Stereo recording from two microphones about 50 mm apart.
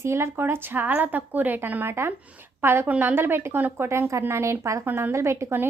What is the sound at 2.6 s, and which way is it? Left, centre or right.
A woman's voice, right.